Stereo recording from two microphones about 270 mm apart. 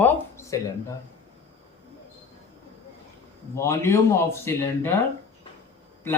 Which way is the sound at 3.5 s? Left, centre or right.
Centre.